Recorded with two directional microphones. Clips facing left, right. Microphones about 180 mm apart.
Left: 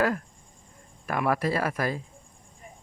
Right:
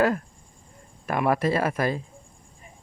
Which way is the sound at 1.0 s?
25° right (ahead or behind).